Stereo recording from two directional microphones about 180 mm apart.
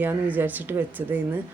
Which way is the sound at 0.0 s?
10° right (ahead or behind).